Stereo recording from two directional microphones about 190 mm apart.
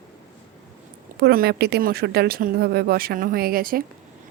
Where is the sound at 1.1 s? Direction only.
55° right (ahead or behind).